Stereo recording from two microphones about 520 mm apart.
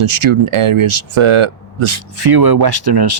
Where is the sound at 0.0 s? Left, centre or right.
Right.